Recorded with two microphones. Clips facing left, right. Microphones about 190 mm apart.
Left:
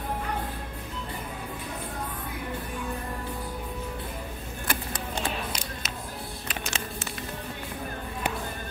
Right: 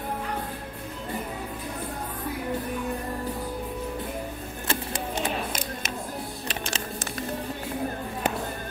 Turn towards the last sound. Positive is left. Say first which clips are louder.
# right 2 dB
turn(degrees=-35)  # may be behind; listen again after turning